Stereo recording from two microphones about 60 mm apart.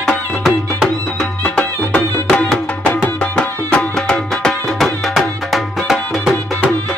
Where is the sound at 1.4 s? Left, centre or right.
Centre.